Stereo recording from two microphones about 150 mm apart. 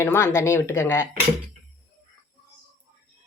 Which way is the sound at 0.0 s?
20° left (ahead or behind).